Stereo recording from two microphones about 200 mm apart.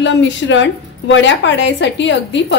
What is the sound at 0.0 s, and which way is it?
A woman's voice, 65° left (ahead or behind).